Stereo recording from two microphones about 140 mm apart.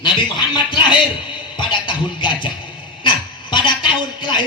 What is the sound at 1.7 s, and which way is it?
A man's voice, 35° left (ahead or behind).